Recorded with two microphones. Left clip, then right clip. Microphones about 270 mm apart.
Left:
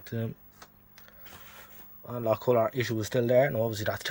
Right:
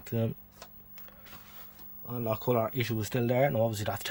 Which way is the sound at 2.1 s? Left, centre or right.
Centre.